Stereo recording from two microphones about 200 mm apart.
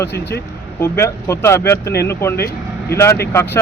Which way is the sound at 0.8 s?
15° left (ahead or behind).